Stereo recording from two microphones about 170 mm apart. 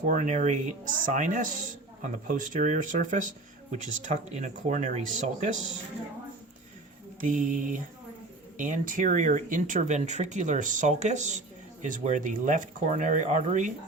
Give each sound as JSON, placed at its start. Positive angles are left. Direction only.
{"t": 0.0, "sound": "speech", "side_deg": -45}
{"t": 7.2, "sound": "speech", "side_deg": -50}